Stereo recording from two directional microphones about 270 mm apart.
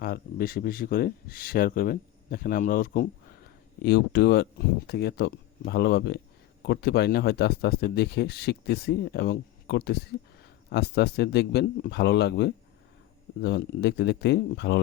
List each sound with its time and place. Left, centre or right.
0.0 s speech: left